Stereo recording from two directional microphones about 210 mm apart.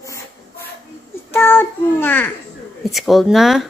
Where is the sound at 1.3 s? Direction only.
10° left (ahead or behind).